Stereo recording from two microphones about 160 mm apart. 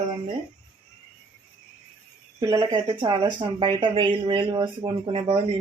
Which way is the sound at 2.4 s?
20° right (ahead or behind).